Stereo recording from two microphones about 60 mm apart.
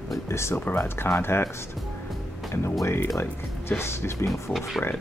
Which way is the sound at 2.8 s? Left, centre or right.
Left.